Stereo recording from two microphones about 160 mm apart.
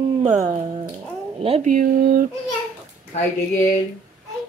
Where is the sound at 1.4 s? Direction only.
35° right (ahead or behind).